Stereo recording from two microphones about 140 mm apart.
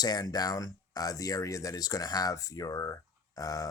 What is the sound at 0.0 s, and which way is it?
Speech, 30° left (ahead or behind).